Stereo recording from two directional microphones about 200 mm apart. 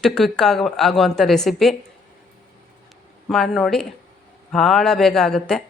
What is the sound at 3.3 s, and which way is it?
Speech, centre (ahead or behind).